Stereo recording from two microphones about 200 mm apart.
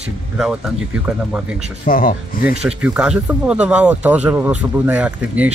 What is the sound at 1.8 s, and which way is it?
Speech, 45° left (ahead or behind).